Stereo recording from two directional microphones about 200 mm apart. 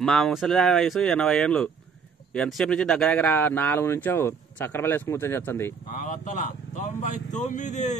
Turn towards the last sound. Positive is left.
turn(degrees=35)  # may be behind; listen again after turning